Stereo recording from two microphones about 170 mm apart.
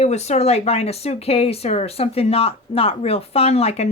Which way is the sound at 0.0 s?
40° left (ahead or behind).